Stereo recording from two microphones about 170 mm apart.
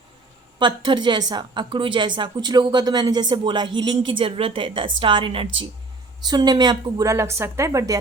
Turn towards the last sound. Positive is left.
turn(degrees=-20)  # may be behind; listen again after turning